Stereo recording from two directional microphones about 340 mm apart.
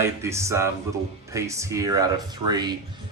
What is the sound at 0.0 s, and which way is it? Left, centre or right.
Speech, centre.